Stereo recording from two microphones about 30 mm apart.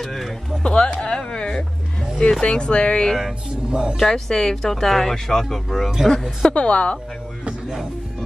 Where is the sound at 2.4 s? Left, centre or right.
Left.